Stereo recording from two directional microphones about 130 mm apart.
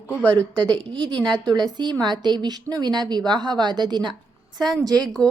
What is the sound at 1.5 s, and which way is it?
A woman's voice, 35° right (ahead or behind).